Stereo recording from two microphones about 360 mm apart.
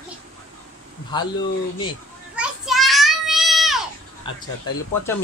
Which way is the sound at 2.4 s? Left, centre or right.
Centre.